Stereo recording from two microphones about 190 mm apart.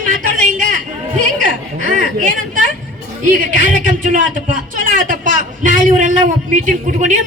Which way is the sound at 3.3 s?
45° right (ahead or behind).